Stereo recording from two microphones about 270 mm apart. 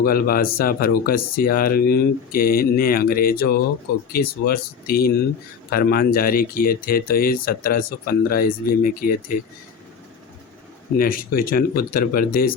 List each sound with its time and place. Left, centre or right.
0.0 s speech: left
10.9 s speech: left